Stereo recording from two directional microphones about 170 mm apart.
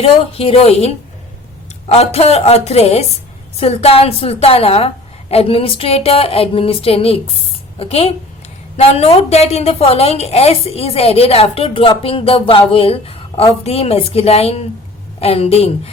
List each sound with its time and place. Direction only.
0.0 s a woman's voice: 35° left (ahead or behind)